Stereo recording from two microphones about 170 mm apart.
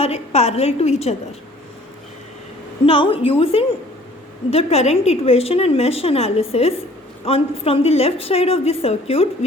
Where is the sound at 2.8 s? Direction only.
30° left (ahead or behind).